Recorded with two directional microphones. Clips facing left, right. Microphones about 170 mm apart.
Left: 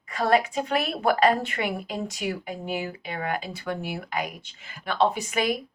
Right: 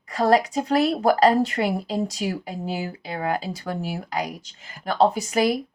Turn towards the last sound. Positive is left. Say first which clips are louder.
# right 4 dB
turn(degrees=-35)  # may be behind; listen again after turning